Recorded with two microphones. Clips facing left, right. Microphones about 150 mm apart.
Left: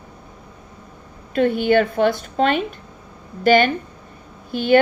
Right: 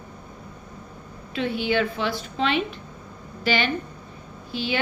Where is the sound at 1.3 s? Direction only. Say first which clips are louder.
Left 8 dB; 50° left (ahead or behind).